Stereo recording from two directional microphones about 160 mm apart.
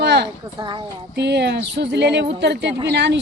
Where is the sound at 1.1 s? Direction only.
90° right.